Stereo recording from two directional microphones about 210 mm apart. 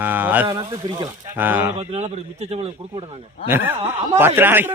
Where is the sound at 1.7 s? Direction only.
30° right (ahead or behind).